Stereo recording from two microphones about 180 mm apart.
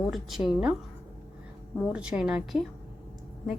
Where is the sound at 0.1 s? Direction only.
Centre (ahead or behind).